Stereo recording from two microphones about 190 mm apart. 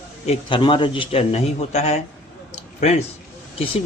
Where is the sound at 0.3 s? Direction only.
25° left (ahead or behind).